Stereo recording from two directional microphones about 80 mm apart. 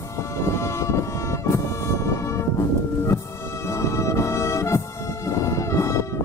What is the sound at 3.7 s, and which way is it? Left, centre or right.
Music, left.